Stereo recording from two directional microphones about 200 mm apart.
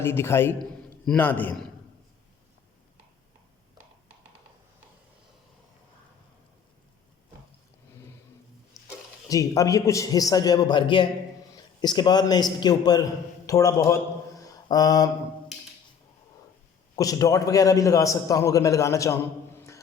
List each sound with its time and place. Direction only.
0.0 s a man's voice: 10° left (ahead or behind)
9.3 s a man's voice: 15° left (ahead or behind)
14.4 s a sound: 20° left (ahead or behind)
16.9 s a man's voice: 15° left (ahead or behind)